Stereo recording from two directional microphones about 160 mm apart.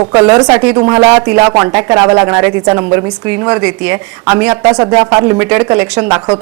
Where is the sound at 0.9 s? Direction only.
25° right (ahead or behind).